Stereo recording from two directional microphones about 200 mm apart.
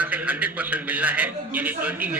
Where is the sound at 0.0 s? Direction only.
5° right (ahead or behind).